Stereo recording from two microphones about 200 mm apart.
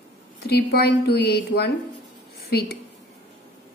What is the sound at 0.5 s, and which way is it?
A woman's voice, 55° left (ahead or behind).